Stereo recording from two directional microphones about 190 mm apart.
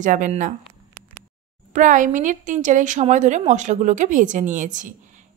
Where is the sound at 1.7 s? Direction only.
45° right (ahead or behind).